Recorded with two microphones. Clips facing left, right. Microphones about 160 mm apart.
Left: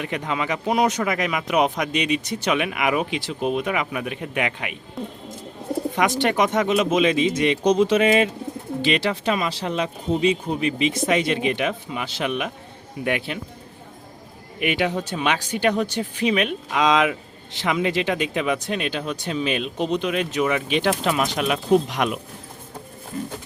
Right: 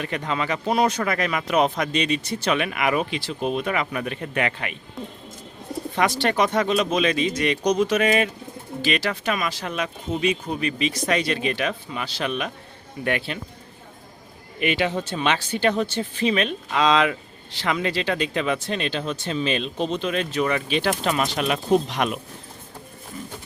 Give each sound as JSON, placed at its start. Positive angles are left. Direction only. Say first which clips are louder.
{"t": 0.0, "sound": "speech", "louder": "even", "side_deg": 15}
{"t": 6.0, "sound": "speech", "louder": "even", "side_deg": 15}
{"t": 14.6, "sound": "speech", "louder": "even", "side_deg": 10}
{"t": 20.4, "sound": "speech", "louder": "left 2 dB", "side_deg": 5}